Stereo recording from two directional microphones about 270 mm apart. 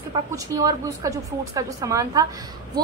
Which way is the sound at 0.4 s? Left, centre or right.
Centre.